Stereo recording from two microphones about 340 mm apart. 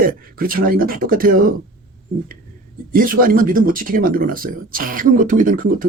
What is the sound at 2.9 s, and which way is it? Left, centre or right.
Speech, right.